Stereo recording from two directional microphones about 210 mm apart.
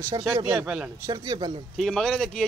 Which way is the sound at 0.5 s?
5° right (ahead or behind).